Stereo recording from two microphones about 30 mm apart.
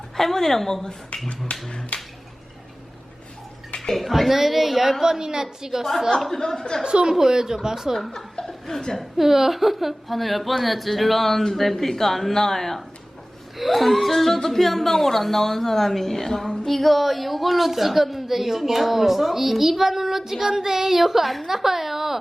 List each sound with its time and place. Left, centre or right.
0.2 s speech: centre
1.1 s speech: left
1.5 s finger snapping: left
1.9 s a sound: left
3.9 s speech: centre
5.0 s a woman's voice: right
6.1 s a woman's voice: centre
6.8 s a woman's voice: right
7.1 s speech: centre
7.9 s speech: centre
8.4 s chuckle: centre
9.0 s a woman's voice: centre